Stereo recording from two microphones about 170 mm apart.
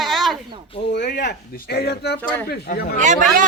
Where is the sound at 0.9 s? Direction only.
85° left; by 2.8 s 65° left (ahead or behind).